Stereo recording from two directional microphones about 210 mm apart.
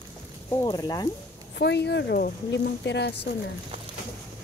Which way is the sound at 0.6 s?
20° left (ahead or behind).